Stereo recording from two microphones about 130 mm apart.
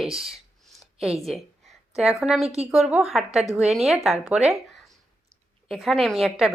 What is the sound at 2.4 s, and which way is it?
Speech, 55° right (ahead or behind).